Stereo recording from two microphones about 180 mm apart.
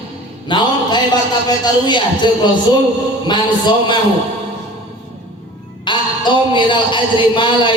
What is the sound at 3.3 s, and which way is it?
Speech, 25° left (ahead or behind).